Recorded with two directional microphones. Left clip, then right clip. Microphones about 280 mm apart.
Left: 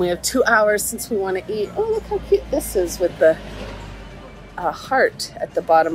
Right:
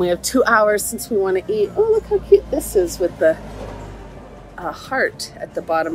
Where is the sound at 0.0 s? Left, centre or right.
Centre.